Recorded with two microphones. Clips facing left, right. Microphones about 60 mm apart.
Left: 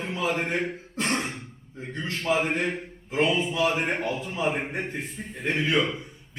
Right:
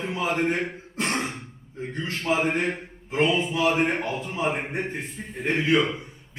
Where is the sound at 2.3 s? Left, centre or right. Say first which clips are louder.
Right 1 dB; centre.